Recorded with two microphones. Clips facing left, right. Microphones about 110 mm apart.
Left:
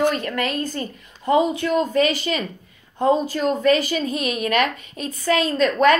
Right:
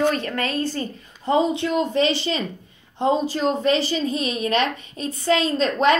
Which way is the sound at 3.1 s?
45° left (ahead or behind).